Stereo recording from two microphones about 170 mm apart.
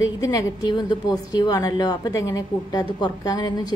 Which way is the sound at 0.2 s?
20° left (ahead or behind).